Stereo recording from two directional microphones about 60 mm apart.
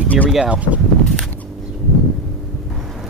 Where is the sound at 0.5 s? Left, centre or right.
Right.